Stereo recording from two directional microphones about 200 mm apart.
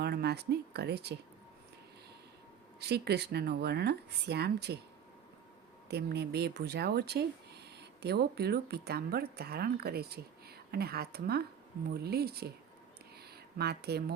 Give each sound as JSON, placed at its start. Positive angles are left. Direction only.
{"t": 0.0, "sound": "speech", "side_deg": -55}
{"t": 2.8, "sound": "speech", "side_deg": -55}
{"t": 5.9, "sound": "speech", "side_deg": -55}
{"t": 13.6, "sound": "speech", "side_deg": -55}